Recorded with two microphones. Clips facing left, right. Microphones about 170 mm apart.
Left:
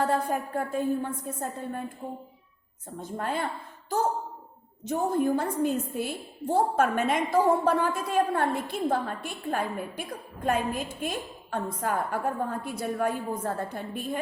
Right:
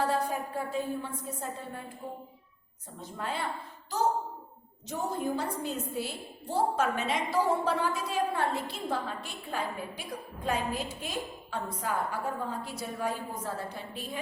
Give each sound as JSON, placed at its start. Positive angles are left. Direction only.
{"t": 0.0, "sound": "a woman's voice", "side_deg": 55}
{"t": 3.0, "sound": "a woman's voice", "side_deg": 50}